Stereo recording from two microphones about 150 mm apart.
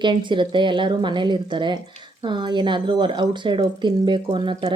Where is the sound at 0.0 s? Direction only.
30° right (ahead or behind).